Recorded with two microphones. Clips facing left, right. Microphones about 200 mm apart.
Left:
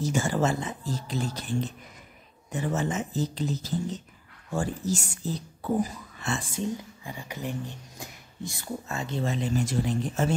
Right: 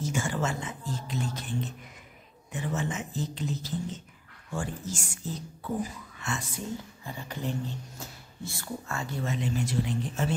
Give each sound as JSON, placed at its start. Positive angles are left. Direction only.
{"t": 0.0, "sound": "speech", "side_deg": 35}
{"t": 7.1, "sound": "speech", "side_deg": 10}
{"t": 9.2, "sound": "speech", "side_deg": 35}